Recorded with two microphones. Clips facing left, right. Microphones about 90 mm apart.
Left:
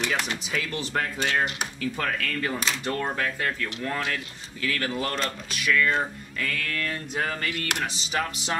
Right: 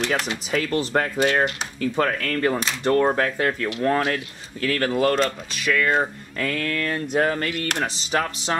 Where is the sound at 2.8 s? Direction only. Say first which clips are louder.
Right 13 dB; 35° right (ahead or behind).